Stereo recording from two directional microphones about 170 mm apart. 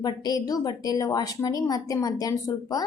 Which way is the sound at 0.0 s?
25° left (ahead or behind).